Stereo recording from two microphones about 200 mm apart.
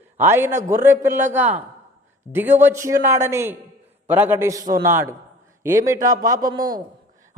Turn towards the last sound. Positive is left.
turn(degrees=-20)  # may be behind; listen again after turning